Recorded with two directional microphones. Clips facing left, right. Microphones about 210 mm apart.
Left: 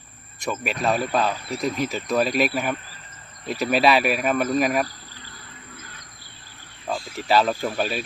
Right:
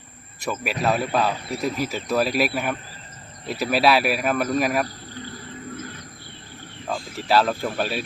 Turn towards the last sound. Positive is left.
turn(degrees=5)  # may be behind; listen again after turning